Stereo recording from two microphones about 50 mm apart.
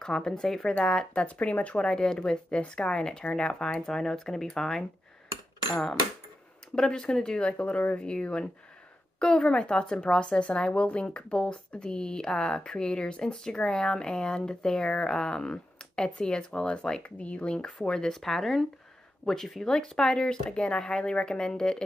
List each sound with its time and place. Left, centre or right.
0.0 s a woman's voice: centre
1.2 s speech: left
1.8 s a woman's voice: centre
6.7 s a woman's voice: centre
7.5 s a woman's voice: left; by 21.8 s centre